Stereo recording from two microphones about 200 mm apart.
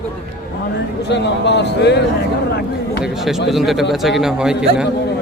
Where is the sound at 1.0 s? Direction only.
60° left (ahead or behind).